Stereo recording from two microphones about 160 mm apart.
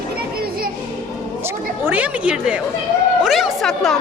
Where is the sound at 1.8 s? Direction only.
10° right (ahead or behind).